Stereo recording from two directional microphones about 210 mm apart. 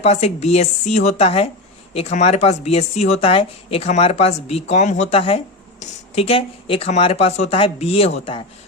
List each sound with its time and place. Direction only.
0.0 s a woman's voice: 30° left (ahead or behind)